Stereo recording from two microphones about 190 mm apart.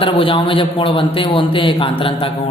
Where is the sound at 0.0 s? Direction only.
30° left (ahead or behind).